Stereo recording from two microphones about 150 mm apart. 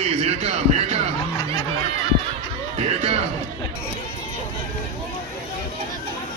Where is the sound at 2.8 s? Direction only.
45° right (ahead or behind).